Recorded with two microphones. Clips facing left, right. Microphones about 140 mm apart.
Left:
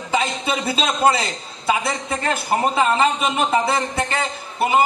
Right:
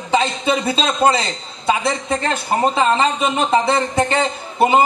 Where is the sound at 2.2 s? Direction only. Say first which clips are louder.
Right 1 dB; 30° right (ahead or behind).